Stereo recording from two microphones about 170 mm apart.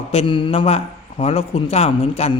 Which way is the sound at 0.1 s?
35° left (ahead or behind).